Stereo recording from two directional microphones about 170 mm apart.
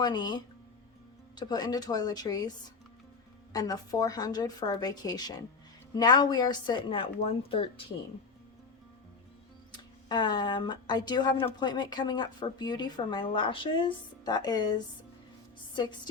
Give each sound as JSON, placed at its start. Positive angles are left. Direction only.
{"t": 0.0, "sound": "a woman's voice", "side_deg": 25}
{"t": 3.5, "sound": "a woman's voice", "side_deg": 20}
{"t": 10.1, "sound": "a woman's voice", "side_deg": 25}
{"t": 15.7, "sound": "a woman's voice", "side_deg": 25}